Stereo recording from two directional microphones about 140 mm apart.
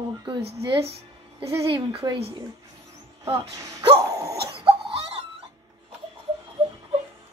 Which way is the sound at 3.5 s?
25° right (ahead or behind).